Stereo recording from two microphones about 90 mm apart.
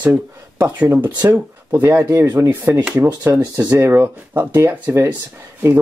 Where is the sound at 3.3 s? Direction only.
40° right (ahead or behind); by 4.9 s 20° right (ahead or behind).